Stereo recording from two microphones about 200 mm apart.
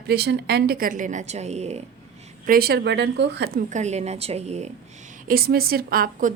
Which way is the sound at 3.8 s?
35° right (ahead or behind).